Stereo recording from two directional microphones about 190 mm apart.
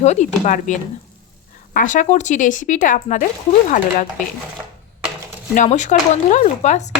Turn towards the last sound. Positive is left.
turn(degrees=40)  # may be behind; listen again after turning